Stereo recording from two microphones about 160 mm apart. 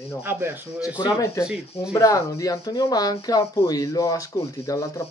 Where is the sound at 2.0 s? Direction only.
20° left (ahead or behind).